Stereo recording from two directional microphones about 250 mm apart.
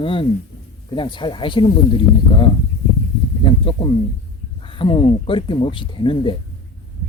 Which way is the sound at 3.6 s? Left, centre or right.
Left.